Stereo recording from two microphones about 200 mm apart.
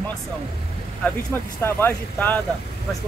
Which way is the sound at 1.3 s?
10° left (ahead or behind).